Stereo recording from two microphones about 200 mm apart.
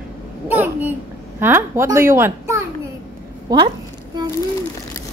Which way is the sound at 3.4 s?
20° right (ahead or behind).